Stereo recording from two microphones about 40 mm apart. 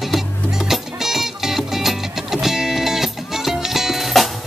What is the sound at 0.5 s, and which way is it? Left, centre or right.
Music, centre.